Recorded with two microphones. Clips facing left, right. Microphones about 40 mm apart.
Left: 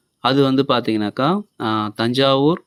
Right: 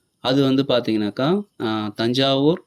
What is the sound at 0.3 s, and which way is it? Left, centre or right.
Speech, centre.